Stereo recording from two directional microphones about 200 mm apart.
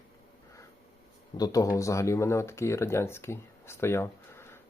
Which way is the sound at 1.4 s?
15° left (ahead or behind).